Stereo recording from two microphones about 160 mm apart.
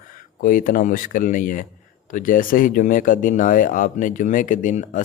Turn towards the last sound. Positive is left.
turn(degrees=50)  # may be behind; listen again after turning